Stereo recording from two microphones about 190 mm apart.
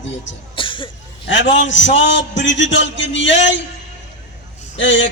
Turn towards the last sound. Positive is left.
turn(degrees=75)  # may be behind; listen again after turning